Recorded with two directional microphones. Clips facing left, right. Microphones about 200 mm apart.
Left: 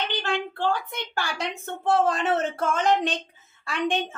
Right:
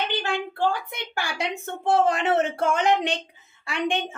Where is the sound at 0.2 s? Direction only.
10° right (ahead or behind).